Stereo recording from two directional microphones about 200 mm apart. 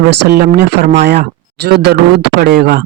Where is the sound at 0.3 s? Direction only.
50° right (ahead or behind).